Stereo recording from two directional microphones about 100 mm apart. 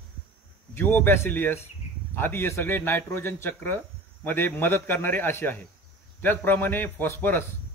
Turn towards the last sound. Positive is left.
turn(degrees=20)  # may be behind; listen again after turning